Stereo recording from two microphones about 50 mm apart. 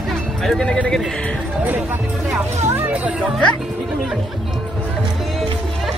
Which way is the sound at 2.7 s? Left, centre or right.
Right.